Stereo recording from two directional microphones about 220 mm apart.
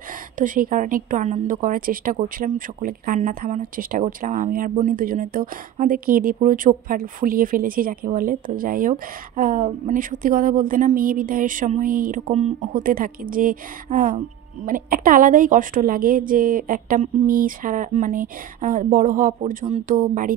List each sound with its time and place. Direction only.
0.4 s a woman's voice: 35° right (ahead or behind)